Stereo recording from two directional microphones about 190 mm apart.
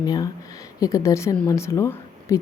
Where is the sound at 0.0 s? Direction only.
20° left (ahead or behind).